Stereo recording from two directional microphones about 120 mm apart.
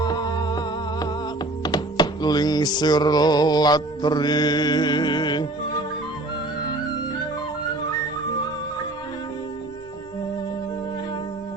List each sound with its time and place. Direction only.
0.0 s music: 35° left (ahead or behind)